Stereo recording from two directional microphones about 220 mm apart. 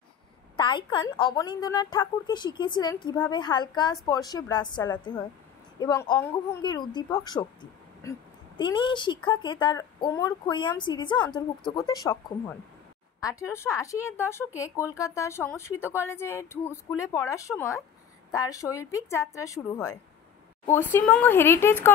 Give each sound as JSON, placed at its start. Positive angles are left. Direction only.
{"t": 0.6, "sound": "a woman's voice", "side_deg": 20}
{"t": 13.2, "sound": "speech", "side_deg": 15}